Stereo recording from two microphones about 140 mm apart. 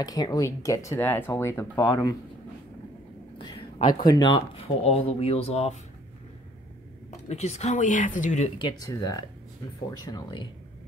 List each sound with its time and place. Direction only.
0.0 s speech: 25° left (ahead or behind)
3.3 s a sound: 35° left (ahead or behind)
3.8 s speech: 30° left (ahead or behind)
4.8 s speech: 45° left (ahead or behind)
7.2 s speech: 50° left (ahead or behind)
8.5 s speech: 25° left (ahead or behind)